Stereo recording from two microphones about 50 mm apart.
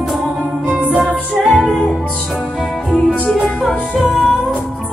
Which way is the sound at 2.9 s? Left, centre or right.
Centre.